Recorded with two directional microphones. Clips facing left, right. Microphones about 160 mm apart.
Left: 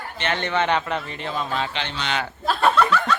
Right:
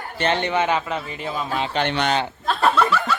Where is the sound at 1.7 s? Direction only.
55° right (ahead or behind).